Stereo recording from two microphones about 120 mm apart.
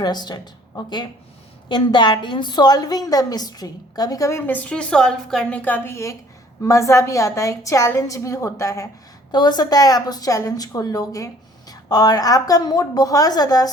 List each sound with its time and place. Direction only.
0.0 s a woman's voice: 35° left (ahead or behind)